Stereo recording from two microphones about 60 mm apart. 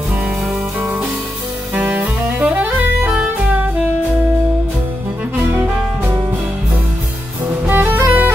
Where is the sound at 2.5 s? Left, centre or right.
Right.